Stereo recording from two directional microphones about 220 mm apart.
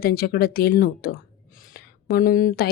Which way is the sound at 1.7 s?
40° left (ahead or behind).